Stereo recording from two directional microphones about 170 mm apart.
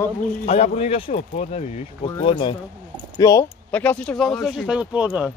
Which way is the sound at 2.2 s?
30° left (ahead or behind).